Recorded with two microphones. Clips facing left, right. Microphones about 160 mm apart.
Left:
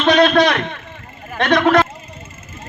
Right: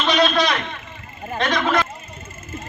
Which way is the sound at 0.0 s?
60° left (ahead or behind).